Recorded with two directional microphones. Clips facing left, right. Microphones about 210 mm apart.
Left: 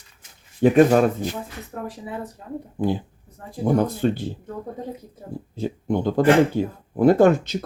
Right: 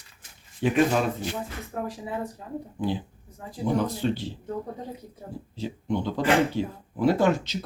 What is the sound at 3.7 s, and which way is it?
Speech, 50° left (ahead or behind).